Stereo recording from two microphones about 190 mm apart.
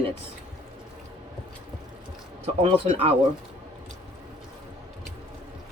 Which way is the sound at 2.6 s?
35° right (ahead or behind).